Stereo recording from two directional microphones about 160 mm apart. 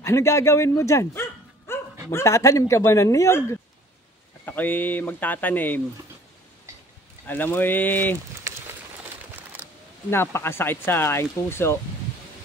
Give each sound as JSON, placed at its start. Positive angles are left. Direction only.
{"t": 0.0, "sound": "speech", "side_deg": 15}
{"t": 1.7, "sound": "dog", "side_deg": 15}
{"t": 2.0, "sound": "speech", "side_deg": 15}
{"t": 7.2, "sound": "speech", "side_deg": 10}
{"t": 10.0, "sound": "speech", "side_deg": 15}